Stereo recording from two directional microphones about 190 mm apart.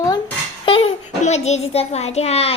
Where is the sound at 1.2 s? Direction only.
35° left (ahead or behind).